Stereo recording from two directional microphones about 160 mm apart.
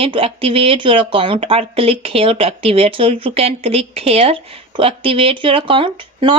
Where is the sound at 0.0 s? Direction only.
35° right (ahead or behind).